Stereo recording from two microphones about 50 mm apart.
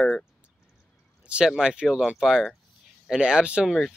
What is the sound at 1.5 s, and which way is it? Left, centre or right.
Speech, centre.